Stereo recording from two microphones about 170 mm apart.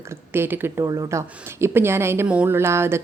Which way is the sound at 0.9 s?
25° right (ahead or behind).